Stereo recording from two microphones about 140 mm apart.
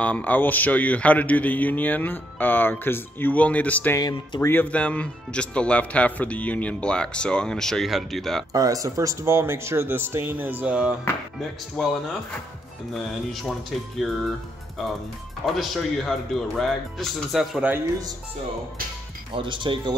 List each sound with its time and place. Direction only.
0.0 s speech: 10° left (ahead or behind)
4.0 s speech: 30° left (ahead or behind)
4.5 s speech: 10° left (ahead or behind)
8.5 s speech: 25° right (ahead or behind); by 11.9 s centre (ahead or behind)
12.9 s speech: centre (ahead or behind)
15.4 s speech: centre (ahead or behind)
19.3 s speech: 35° right (ahead or behind)